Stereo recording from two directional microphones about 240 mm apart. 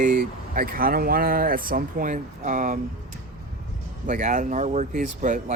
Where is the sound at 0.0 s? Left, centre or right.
Right.